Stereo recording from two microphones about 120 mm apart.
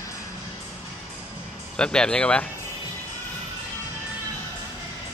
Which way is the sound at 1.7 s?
5° left (ahead or behind).